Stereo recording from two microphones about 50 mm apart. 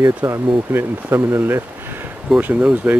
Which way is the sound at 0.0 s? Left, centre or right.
Right.